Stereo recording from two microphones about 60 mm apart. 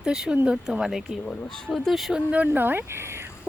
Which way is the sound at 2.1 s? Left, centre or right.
Right.